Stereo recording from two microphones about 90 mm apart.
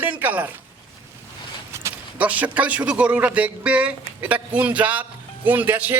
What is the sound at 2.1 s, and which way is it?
Speech, 15° right (ahead or behind).